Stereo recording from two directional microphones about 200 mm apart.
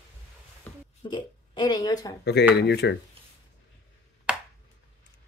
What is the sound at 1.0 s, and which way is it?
Speech, 25° left (ahead or behind).